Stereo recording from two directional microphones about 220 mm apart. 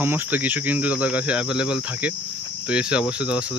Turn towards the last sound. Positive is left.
turn(degrees=-5)  # may be behind; listen again after turning